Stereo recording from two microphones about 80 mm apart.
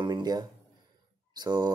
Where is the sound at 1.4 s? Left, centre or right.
Right.